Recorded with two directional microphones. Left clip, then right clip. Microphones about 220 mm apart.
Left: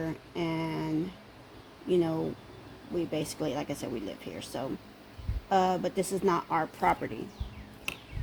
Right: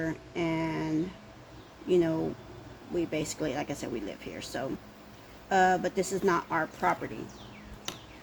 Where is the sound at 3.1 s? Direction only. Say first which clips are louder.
Even; 25° left (ahead or behind).